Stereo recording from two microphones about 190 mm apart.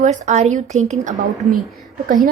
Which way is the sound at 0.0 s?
40° right (ahead or behind).